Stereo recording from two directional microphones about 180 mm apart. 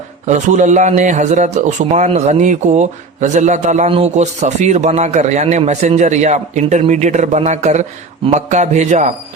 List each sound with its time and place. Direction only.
0.3 s a man's voice: 40° right (ahead or behind)